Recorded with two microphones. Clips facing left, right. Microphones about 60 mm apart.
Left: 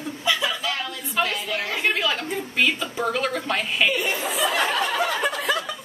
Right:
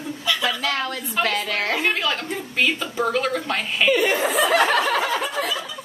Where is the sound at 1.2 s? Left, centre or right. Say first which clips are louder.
Right 4 dB; right.